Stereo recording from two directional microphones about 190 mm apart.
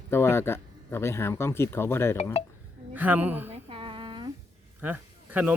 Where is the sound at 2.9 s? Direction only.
10° right (ahead or behind).